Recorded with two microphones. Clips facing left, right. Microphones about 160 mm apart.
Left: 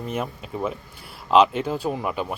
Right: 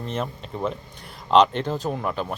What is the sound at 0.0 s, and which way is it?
Speech, 10° left (ahead or behind).